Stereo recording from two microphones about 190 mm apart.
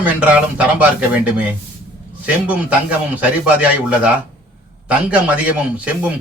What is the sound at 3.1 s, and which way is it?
Speech, 5° right (ahead or behind).